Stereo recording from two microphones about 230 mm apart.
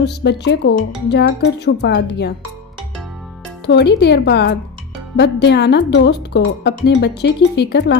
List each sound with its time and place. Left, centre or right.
0.0 s speech: left
3.7 s speech: left